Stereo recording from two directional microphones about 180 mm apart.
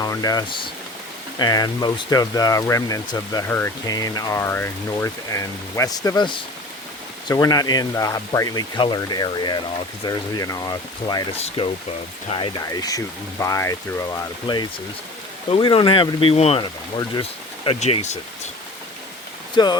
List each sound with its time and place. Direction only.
0.0 s speech: 20° left (ahead or behind)
11.3 s speech: 35° left (ahead or behind)
17.7 s speech: 35° left (ahead or behind)
19.5 s speech: 25° left (ahead or behind)